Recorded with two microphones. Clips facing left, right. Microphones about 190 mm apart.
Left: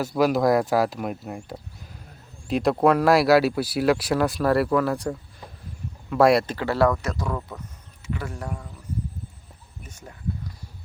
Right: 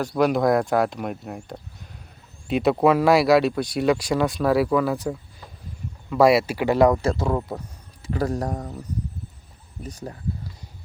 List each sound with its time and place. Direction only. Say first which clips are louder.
0.0 s speech: even; 5° left (ahead or behind); by 7.0 s 20° right (ahead or behind)
7.0 s speech: right 6 dB; 30° right (ahead or behind)